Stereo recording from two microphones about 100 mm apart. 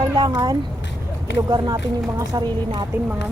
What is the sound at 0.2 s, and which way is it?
Speech, 45° right (ahead or behind).